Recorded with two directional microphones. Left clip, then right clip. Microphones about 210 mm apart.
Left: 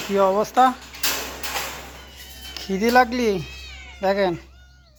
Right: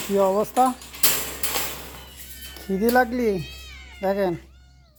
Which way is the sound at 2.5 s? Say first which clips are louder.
Left 1 dB; 15° right (ahead or behind).